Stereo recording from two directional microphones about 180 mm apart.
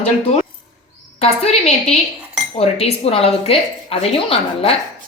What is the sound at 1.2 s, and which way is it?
A woman's voice, 35° left (ahead or behind).